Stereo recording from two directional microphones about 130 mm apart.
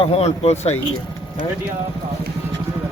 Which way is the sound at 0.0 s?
55° left (ahead or behind).